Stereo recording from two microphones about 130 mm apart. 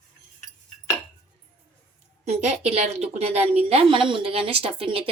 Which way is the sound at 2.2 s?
60° right (ahead or behind).